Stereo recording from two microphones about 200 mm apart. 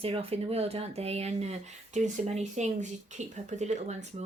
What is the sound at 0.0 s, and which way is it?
Speech, 30° right (ahead or behind).